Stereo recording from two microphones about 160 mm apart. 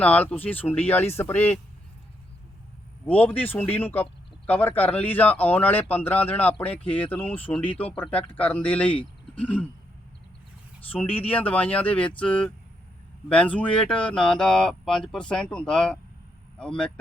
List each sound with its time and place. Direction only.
0.0 s speech: 10° left (ahead or behind)
3.1 s speech: 10° left (ahead or behind)
9.3 s throat clearing: 10° left (ahead or behind)
10.8 s speech: 10° left (ahead or behind)